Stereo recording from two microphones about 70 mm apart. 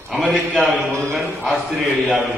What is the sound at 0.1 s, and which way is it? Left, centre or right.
Speech, centre.